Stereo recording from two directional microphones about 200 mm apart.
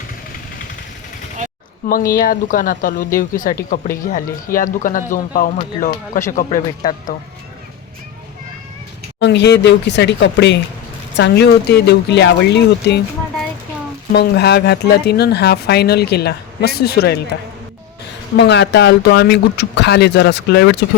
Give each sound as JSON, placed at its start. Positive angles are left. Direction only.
{"t": 1.9, "sound": "speech", "side_deg": 45}
{"t": 9.2, "sound": "speech", "side_deg": 60}
{"t": 14.1, "sound": "speech", "side_deg": 55}
{"t": 18.3, "sound": "speech", "side_deg": 60}